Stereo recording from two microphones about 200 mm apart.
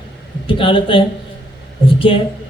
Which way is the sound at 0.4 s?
25° left (ahead or behind).